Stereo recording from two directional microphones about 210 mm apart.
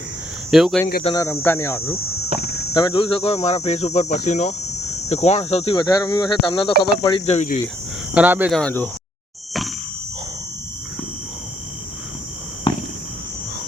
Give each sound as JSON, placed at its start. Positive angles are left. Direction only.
{"t": 0.5, "sound": "speech", "side_deg": 0}
{"t": 1.0, "sound": "speech", "side_deg": 15}
{"t": 2.3, "sound": "cricket", "side_deg": -30}
{"t": 2.7, "sound": "speech", "side_deg": 20}
{"t": 5.7, "sound": "speech", "side_deg": 20}
{"t": 8.1, "sound": "speech", "side_deg": -10}
{"t": 8.5, "sound": "speech", "side_deg": 5}
{"t": 9.5, "sound": "a sound", "side_deg": 0}
{"t": 12.7, "sound": "walk", "side_deg": 25}